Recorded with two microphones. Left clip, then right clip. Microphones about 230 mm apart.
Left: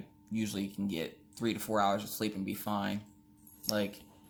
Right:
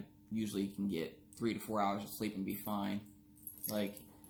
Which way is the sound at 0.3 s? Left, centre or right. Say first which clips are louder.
Left 2 dB; left.